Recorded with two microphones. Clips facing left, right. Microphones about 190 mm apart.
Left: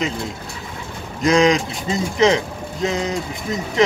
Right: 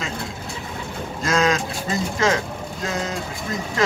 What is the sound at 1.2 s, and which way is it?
Speech, 15° left (ahead or behind).